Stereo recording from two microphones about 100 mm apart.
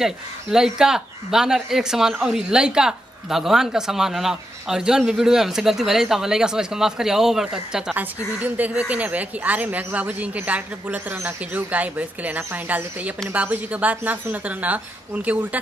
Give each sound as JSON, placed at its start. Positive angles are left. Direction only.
{"t": 0.0, "sound": "a woman's voice", "side_deg": -5}